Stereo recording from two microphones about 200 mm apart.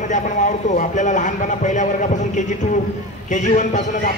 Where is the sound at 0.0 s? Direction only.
40° left (ahead or behind).